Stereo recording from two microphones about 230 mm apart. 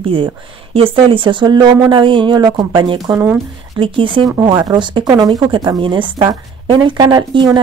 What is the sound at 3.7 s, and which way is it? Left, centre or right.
Speech, right.